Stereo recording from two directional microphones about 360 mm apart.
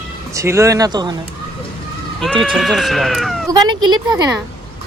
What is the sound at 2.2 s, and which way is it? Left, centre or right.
Speech, centre.